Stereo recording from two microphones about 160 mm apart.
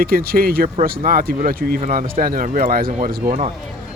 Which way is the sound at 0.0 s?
70° right (ahead or behind).